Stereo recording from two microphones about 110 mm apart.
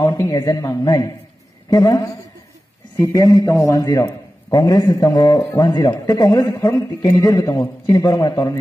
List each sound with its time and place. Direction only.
0.0 s a man's voice: 30° left (ahead or behind)